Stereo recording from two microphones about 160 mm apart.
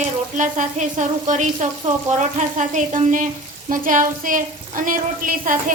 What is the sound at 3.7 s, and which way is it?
A woman's voice, 60° right (ahead or behind).